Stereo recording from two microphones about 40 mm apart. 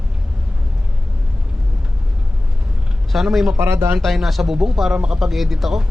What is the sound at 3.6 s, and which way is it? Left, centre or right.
Speech, right.